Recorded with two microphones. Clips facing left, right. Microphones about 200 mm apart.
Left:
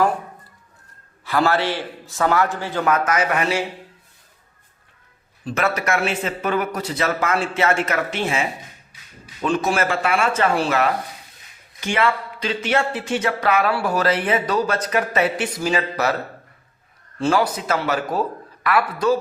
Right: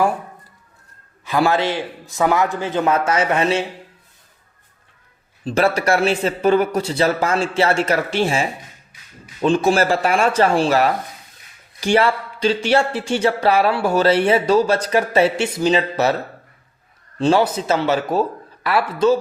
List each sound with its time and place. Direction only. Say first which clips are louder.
1.2 s a man's voice: right 2 dB; 15° right (ahead or behind)
5.5 s speech: right 5 dB; 30° right (ahead or behind)
17.2 s speech: right 3 dB; 20° right (ahead or behind)